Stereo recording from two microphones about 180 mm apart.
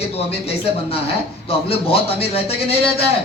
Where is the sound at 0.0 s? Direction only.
35° left (ahead or behind).